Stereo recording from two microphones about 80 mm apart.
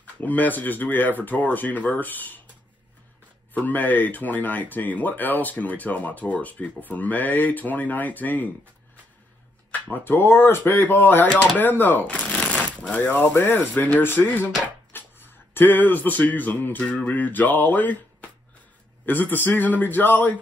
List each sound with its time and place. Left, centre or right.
0.0 s speech: centre
3.5 s speech: left
9.7 s speech: left